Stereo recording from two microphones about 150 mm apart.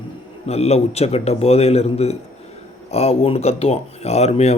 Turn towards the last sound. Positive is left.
turn(degrees=45)  # may be behind; listen again after turning